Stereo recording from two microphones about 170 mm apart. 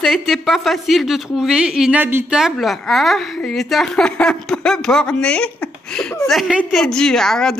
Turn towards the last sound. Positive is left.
turn(degrees=5)  # may be behind; listen again after turning